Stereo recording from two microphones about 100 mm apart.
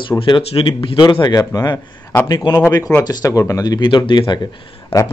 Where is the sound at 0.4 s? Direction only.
75° left (ahead or behind); by 1.0 s 60° left (ahead or behind).